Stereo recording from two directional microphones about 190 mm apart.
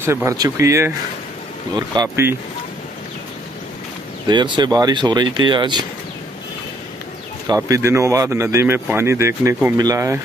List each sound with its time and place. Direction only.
0.0 s speech: 15° right (ahead or behind)
4.3 s speech: 25° right (ahead or behind)
7.4 s speech: 15° right (ahead or behind)